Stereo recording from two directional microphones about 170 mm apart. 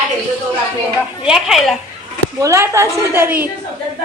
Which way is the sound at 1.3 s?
Centre (ahead or behind).